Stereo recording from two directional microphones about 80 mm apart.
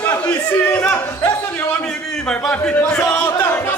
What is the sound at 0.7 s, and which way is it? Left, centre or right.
Speech, left.